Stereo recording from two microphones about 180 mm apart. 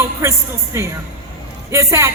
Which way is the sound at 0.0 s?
15° right (ahead or behind).